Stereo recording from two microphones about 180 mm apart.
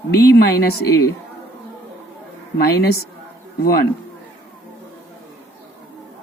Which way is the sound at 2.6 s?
60° left (ahead or behind).